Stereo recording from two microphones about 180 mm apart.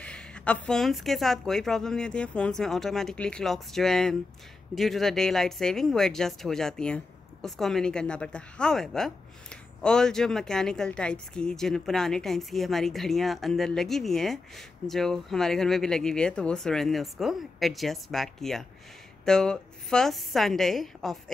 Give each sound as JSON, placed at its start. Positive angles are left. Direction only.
{"t": 0.0, "sound": "a woman's voice", "side_deg": 5}